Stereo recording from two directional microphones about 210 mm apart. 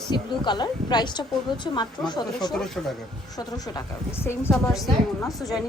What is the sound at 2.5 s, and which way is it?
Speech, centre (ahead or behind).